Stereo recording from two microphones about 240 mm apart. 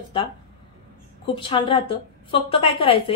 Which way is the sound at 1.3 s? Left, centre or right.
Left.